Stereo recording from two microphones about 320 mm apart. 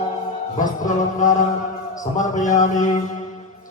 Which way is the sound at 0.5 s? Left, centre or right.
Left.